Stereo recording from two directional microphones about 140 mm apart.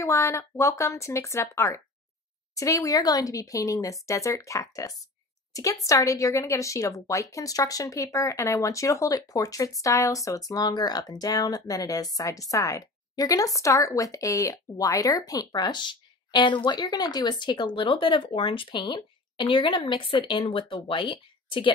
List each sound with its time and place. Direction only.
0.0 s a woman's voice: 20° left (ahead or behind); by 21.7 s 35° left (ahead or behind)